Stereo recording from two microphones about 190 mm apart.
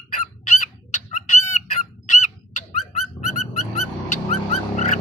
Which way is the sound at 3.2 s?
35° left (ahead or behind).